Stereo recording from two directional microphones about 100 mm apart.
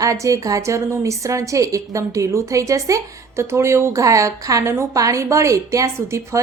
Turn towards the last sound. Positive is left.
turn(degrees=-30)  # may be behind; listen again after turning